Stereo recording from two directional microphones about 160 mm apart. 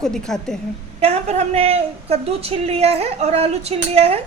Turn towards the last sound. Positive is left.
turn(degrees=-40)  # may be behind; listen again after turning